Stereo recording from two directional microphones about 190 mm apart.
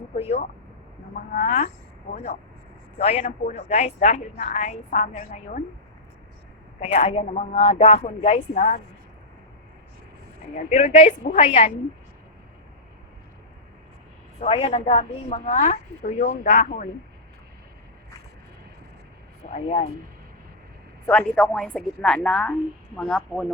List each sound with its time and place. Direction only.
0.2 s a woman's voice: 35° left (ahead or behind)
6.7 s a woman's voice: 35° left (ahead or behind)
8.5 s a woman's voice: 45° left (ahead or behind)
10.7 s a woman's voice: 35° left (ahead or behind)
14.3 s a woman's voice: 30° left (ahead or behind)
19.5 s a woman's voice: 35° left (ahead or behind)
21.1 s a woman's voice: 5° left (ahead or behind)